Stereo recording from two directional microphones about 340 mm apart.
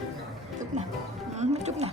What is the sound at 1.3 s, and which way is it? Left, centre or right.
Speech, centre.